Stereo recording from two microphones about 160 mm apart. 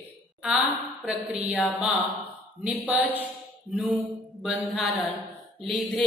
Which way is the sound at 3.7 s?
Centre (ahead or behind).